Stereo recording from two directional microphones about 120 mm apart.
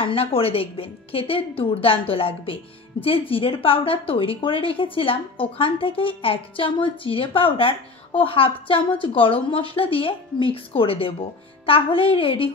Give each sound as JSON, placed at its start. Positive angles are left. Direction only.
{"t": 0.0, "sound": "a woman's voice", "side_deg": 50}